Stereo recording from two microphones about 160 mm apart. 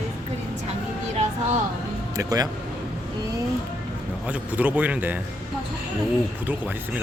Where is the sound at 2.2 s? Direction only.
20° right (ahead or behind).